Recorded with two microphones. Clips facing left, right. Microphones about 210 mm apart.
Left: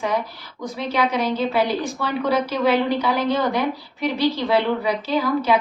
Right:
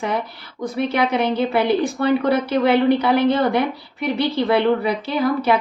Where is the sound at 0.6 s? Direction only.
55° right (ahead or behind).